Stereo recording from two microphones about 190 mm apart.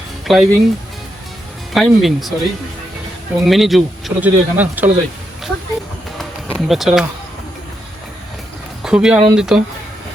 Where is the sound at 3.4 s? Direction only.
Centre (ahead or behind).